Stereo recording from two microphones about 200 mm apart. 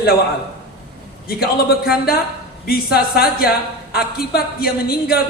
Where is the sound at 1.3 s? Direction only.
50° left (ahead or behind).